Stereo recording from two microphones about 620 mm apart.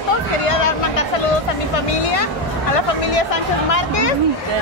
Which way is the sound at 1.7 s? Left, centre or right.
Left.